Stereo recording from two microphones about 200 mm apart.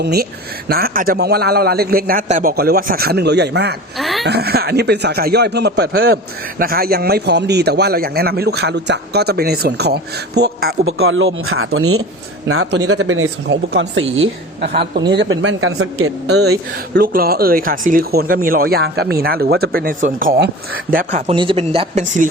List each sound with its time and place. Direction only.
0.0 s a man's voice: 50° right (ahead or behind)
3.9 s a sound: centre (ahead or behind)
4.3 s a man's voice: 50° right (ahead or behind)
10.8 s speech: 90° right; by 14.0 s 70° right (ahead or behind)
15.1 s speech: 65° right (ahead or behind); by 16.6 s 90° right
16.7 s a man's voice: 50° right (ahead or behind)
21.3 s speech: 25° right (ahead or behind)